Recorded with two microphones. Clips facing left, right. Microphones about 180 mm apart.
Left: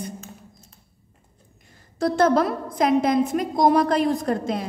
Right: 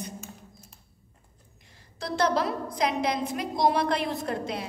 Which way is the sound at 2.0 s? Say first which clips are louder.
Left 7 dB; 50° left (ahead or behind).